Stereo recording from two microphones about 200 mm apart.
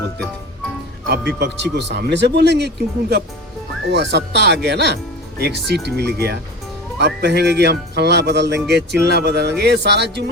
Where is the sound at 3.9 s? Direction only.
60° right (ahead or behind).